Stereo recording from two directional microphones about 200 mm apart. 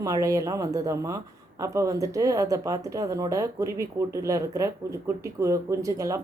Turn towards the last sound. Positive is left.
turn(degrees=-15)  # may be behind; listen again after turning